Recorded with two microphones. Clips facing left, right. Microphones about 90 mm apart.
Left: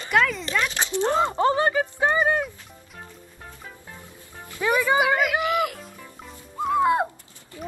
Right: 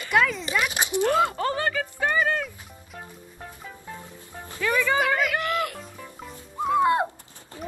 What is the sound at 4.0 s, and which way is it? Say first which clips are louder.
Music: right 2 dB; 25° right (ahead or behind).